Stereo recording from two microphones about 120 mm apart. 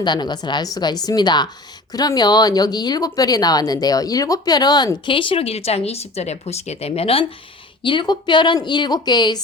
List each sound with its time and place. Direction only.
0.0 s speech: 40° left (ahead or behind); by 7.3 s 55° left (ahead or behind)
7.8 s speech: 40° left (ahead or behind)